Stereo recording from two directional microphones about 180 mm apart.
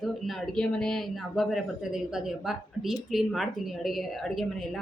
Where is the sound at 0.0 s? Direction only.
Centre (ahead or behind).